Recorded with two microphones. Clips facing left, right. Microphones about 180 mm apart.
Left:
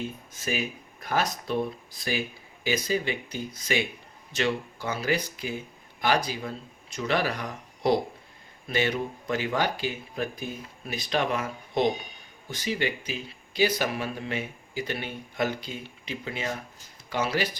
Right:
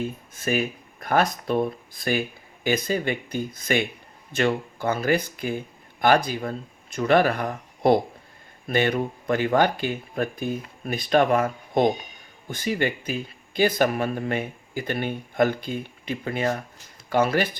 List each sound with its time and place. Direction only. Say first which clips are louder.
0.3 s speech: right 6 dB; 55° right (ahead or behind)